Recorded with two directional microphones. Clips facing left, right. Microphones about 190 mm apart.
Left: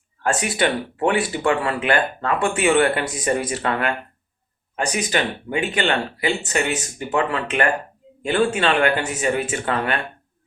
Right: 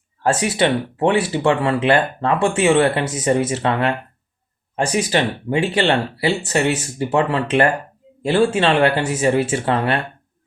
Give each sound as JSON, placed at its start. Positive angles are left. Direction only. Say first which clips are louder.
{"t": 0.2, "sound": "speech", "louder": "right 3 dB", "side_deg": -25}
{"t": 4.9, "sound": "speech", "louder": "right 4 dB", "side_deg": -30}